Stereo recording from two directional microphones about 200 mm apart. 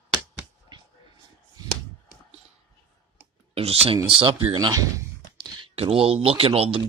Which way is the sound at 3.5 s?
30° right (ahead or behind).